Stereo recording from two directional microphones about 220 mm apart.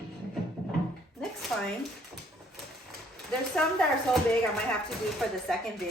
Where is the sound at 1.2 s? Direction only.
Centre (ahead or behind).